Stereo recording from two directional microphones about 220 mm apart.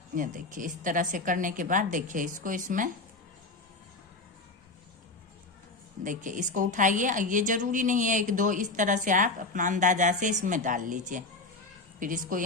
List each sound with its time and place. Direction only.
0.1 s a woman's voice: 40° right (ahead or behind)
6.1 s a woman's voice: 35° right (ahead or behind)